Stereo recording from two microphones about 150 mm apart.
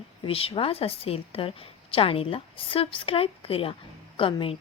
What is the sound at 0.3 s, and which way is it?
A woman's voice, 40° left (ahead or behind).